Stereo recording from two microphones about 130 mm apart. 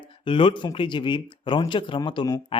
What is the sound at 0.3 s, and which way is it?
Speech, 40° left (ahead or behind).